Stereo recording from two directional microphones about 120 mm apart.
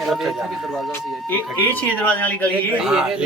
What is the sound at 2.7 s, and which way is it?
Speech, 5° right (ahead or behind).